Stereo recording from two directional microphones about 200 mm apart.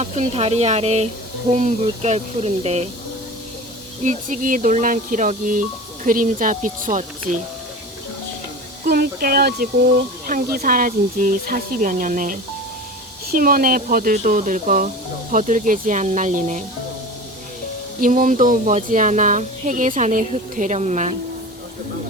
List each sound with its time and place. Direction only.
0.0 s speech: 30° right (ahead or behind)
4.0 s speech: 40° right (ahead or behind)
8.8 s speech: 50° right (ahead or behind)
18.0 s speech: 40° right (ahead or behind)